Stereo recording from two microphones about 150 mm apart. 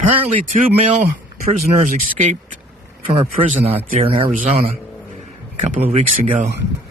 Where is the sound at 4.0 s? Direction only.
40° right (ahead or behind).